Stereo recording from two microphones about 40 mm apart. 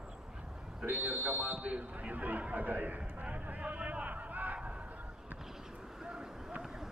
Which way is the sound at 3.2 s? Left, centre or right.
Right.